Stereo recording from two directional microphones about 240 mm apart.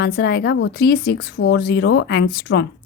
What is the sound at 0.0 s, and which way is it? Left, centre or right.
A woman's voice, left.